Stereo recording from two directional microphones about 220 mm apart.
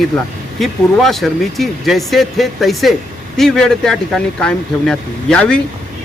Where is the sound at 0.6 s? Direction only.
Centre (ahead or behind).